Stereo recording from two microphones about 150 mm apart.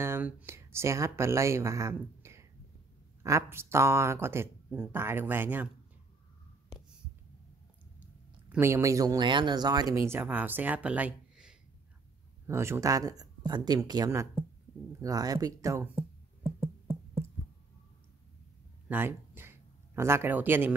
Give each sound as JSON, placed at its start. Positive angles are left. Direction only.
{"t": 0.0, "sound": "speech", "side_deg": -15}
{"t": 8.0, "sound": "speech", "side_deg": -15}
{"t": 12.4, "sound": "speech", "side_deg": -15}
{"t": 15.8, "sound": "music", "side_deg": -15}
{"t": 18.9, "sound": "a sound", "side_deg": -15}